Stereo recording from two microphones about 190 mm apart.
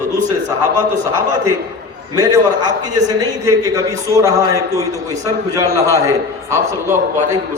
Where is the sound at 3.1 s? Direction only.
20° right (ahead or behind).